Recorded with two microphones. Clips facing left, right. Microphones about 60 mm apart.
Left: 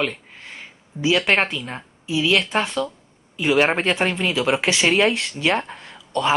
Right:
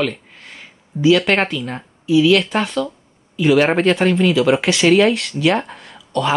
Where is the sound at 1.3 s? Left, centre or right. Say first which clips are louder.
Right 2 dB; left.